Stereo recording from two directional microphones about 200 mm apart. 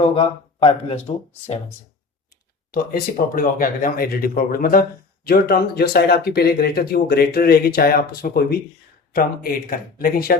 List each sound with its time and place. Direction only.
0.0 s speech: 30° left (ahead or behind)
2.3 s speech: 50° left (ahead or behind)